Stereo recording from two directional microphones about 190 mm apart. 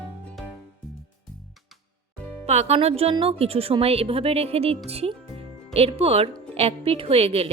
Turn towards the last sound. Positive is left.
turn(degrees=-30)  # may be behind; listen again after turning